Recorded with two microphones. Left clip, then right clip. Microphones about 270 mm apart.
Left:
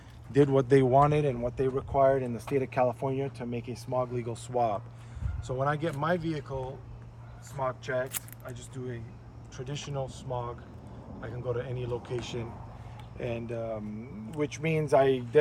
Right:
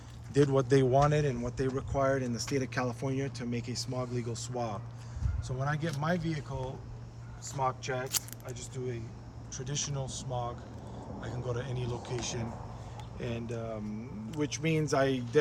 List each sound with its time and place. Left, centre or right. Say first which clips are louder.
0.3 s speech: left 3 dB; left
1.0 s speech: left 3 dB; centre
13.1 s speech: left 4 dB; centre